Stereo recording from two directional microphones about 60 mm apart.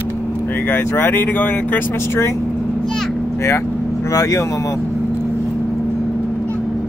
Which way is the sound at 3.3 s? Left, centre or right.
Left.